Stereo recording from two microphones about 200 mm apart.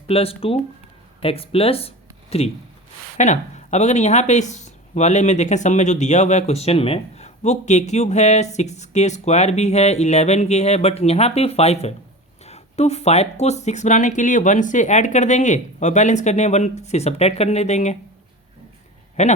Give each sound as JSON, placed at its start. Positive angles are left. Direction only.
{"t": 0.1, "sound": "speech", "side_deg": 30}
{"t": 19.2, "sound": "speech", "side_deg": 35}